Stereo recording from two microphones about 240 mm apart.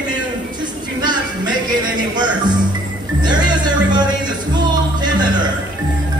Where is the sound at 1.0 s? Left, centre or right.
Centre.